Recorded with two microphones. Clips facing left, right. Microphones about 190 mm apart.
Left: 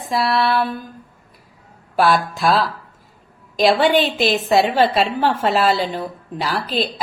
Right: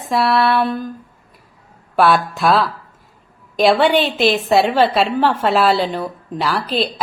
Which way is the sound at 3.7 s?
45° left (ahead or behind).